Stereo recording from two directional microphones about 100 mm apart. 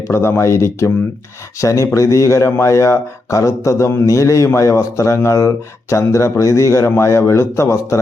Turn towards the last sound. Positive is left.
turn(degrees=30)  # may be behind; listen again after turning